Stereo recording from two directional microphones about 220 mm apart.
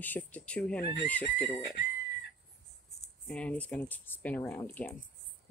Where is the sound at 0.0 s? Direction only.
5° left (ahead or behind).